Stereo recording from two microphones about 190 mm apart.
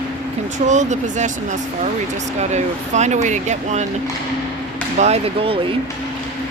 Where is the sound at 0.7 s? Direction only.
40° right (ahead or behind).